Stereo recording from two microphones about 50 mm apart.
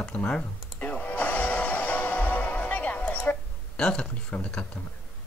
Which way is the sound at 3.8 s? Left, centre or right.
Centre.